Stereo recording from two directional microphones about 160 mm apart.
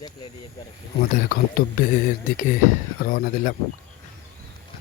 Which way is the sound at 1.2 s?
65° left (ahead or behind).